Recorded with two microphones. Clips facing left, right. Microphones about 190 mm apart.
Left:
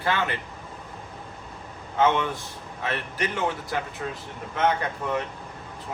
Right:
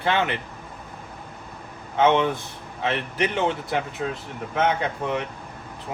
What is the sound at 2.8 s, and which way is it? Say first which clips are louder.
Speech: right 4 dB; 25° right (ahead or behind).